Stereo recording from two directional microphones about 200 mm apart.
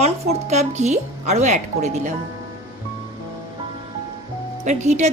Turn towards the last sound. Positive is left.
turn(degrees=-35)  # may be behind; listen again after turning